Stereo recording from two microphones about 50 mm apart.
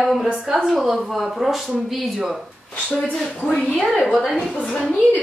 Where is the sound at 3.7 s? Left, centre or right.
Centre.